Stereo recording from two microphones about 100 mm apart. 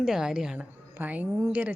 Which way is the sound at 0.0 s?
5° right (ahead or behind).